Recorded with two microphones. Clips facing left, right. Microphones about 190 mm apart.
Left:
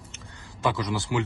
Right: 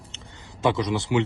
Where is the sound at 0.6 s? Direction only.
20° right (ahead or behind).